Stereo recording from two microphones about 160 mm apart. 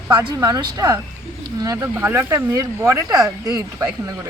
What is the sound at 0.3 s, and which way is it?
Speech, 25° right (ahead or behind).